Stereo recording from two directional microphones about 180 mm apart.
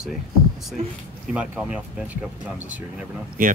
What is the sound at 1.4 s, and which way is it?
Speech, 5° right (ahead or behind).